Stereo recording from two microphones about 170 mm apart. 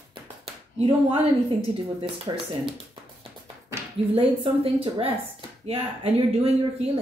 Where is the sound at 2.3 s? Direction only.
25° right (ahead or behind).